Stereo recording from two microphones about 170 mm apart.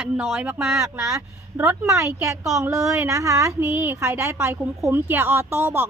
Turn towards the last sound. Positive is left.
turn(degrees=-10)  # may be behind; listen again after turning